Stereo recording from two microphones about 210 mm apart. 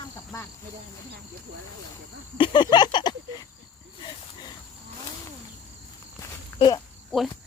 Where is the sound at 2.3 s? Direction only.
20° left (ahead or behind).